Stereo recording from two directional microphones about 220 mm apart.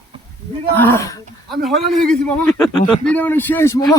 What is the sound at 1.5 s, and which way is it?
A man's voice, centre (ahead or behind).